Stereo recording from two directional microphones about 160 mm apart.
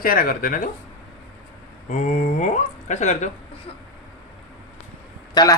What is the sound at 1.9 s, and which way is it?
Speech, 50° left (ahead or behind).